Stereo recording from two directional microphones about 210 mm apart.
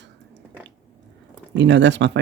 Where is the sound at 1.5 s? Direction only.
60° right (ahead or behind).